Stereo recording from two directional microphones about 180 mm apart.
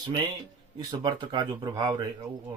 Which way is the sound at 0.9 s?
25° right (ahead or behind).